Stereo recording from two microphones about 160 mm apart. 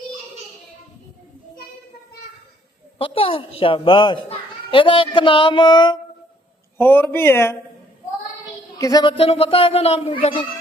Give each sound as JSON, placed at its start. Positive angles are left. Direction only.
{"t": 3.0, "sound": "a child's voice", "side_deg": 35}
{"t": 6.7, "sound": "speech", "side_deg": 10}
{"t": 8.8, "sound": "a child's voice", "side_deg": 25}